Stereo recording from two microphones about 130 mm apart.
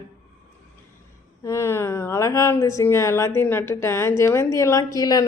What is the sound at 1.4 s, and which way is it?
A woman's voice, 20° left (ahead or behind).